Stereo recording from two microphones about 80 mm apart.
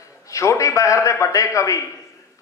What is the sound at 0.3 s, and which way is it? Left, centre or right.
A man's voice, left.